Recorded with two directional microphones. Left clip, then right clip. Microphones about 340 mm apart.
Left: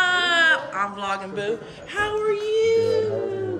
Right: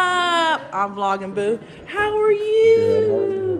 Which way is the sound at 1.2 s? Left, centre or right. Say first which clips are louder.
Right 5 dB; right.